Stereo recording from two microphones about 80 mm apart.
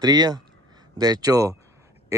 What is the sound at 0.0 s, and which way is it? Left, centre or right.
Speech, right.